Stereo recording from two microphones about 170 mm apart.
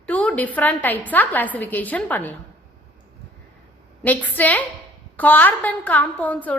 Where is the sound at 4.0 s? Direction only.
10° left (ahead or behind).